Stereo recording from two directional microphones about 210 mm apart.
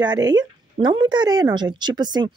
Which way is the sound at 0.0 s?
20° right (ahead or behind).